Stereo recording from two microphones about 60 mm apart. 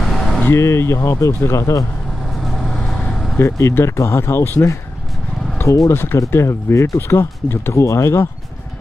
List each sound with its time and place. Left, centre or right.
0.0 s vehicle: centre
0.5 s speech: left
2.4 s vehicle: centre
3.3 s speech: left
5.7 s speech: left